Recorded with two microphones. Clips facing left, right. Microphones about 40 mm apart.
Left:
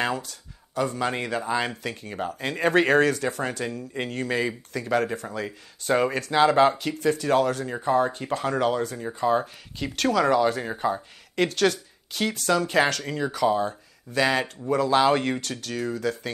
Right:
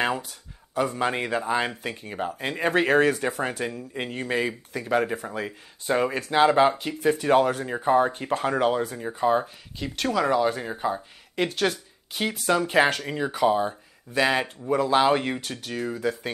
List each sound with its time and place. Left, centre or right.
0.0 s speech: right; by 3.0 s centre
3.0 s speech: centre
5.9 s speech: centre
6.2 s speech: centre
9.8 s speech: centre